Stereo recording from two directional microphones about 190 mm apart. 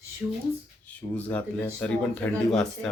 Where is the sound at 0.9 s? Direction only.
10° left (ahead or behind).